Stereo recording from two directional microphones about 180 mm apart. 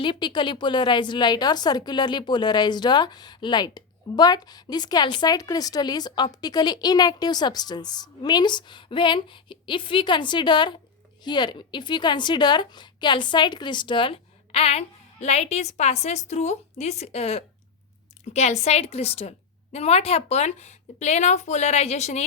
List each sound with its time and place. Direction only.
0.0 s a woman's voice: 25° left (ahead or behind)